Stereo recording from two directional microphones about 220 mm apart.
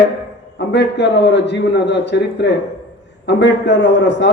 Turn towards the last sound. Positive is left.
turn(degrees=55)  # may be behind; listen again after turning